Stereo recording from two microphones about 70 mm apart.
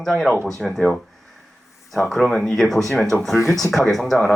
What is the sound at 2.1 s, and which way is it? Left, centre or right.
Speech, centre.